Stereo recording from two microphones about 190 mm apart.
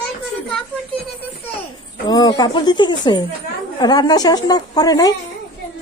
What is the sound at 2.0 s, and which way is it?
A woman's voice, 20° left (ahead or behind).